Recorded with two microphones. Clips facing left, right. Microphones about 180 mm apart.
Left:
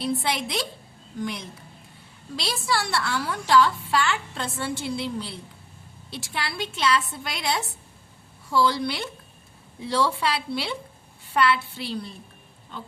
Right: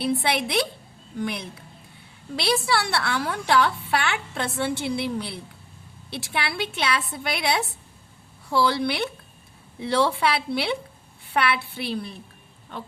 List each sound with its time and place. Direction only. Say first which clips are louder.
0.0 s a woman's voice: right 3 dB; 65° right (ahead or behind)